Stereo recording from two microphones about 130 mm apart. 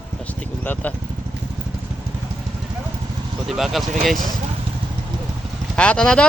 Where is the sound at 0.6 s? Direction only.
10° left (ahead or behind).